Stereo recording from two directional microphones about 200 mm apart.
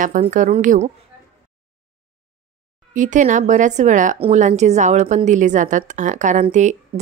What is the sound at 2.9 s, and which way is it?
A woman's voice, 40° right (ahead or behind).